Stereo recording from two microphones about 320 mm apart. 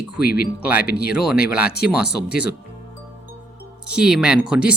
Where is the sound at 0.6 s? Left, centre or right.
Centre.